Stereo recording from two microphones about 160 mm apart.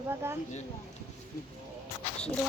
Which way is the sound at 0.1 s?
15° right (ahead or behind).